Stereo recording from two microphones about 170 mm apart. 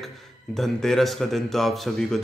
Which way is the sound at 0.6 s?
5° left (ahead or behind).